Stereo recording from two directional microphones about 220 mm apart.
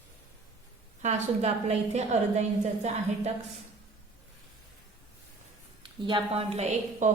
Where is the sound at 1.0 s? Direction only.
30° right (ahead or behind).